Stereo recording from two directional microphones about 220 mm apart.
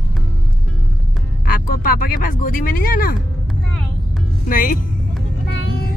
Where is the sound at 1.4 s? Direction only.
40° left (ahead or behind).